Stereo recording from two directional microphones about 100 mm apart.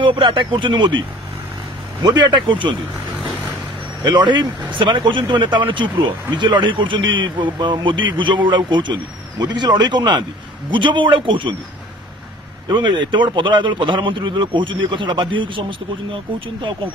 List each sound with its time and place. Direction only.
0.0 s a man's voice: 60° right (ahead or behind)
3.2 s vehicle: 5° right (ahead or behind)
4.0 s a man's voice: 50° right (ahead or behind)
12.6 s a man's voice: 50° right (ahead or behind)